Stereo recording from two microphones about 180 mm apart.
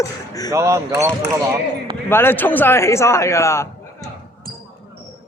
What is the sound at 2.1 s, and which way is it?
A man's voice, 10° left (ahead or behind).